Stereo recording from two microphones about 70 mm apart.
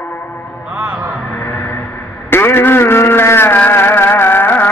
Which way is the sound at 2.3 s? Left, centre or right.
Left.